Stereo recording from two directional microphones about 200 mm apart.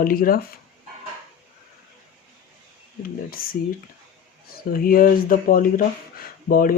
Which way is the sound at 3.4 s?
45° left (ahead or behind).